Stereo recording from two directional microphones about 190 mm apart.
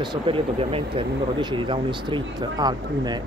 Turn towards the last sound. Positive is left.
turn(degrees=-20)  # may be behind; listen again after turning